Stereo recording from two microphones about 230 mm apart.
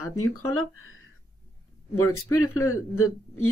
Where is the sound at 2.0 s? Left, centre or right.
Left.